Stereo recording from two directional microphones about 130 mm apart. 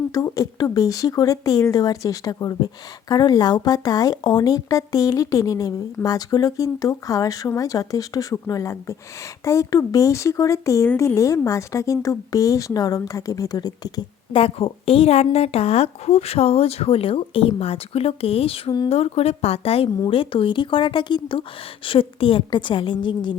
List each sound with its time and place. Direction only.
0.1 s speech: 25° left (ahead or behind)
14.3 s a woman's voice: 45° left (ahead or behind)